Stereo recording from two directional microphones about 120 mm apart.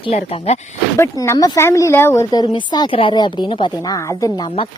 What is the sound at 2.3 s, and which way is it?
Speech, 35° left (ahead or behind).